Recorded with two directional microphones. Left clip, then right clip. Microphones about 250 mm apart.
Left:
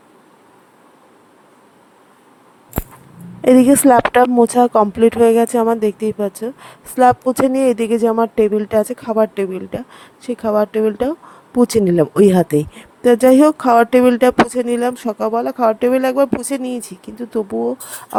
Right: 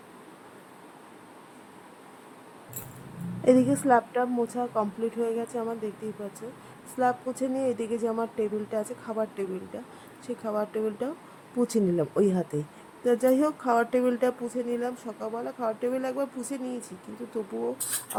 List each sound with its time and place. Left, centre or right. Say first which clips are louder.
3.4 s speech: left 12 dB; left
6.9 s speech: left 15 dB; left